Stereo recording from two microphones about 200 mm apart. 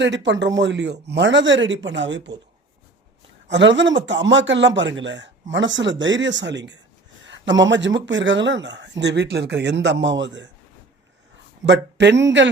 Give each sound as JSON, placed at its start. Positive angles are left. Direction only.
{"t": 0.0, "sound": "speech", "side_deg": -60}
{"t": 3.5, "sound": "speech", "side_deg": -65}
{"t": 11.6, "sound": "speech", "side_deg": -60}